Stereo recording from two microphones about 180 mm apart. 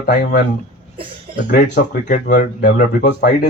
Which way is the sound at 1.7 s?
60° left (ahead or behind).